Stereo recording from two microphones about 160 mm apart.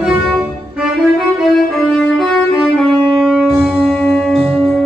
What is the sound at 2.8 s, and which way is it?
Music, centre (ahead or behind).